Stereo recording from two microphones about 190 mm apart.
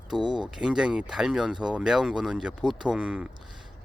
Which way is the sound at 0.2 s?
25° right (ahead or behind).